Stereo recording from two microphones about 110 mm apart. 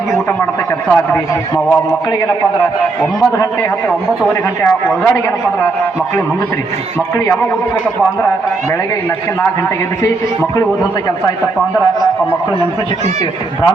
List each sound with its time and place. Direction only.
4.3 s a man's voice: 20° left (ahead or behind)